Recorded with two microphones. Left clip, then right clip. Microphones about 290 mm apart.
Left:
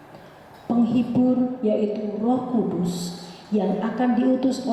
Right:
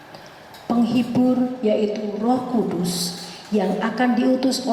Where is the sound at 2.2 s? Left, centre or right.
Centre.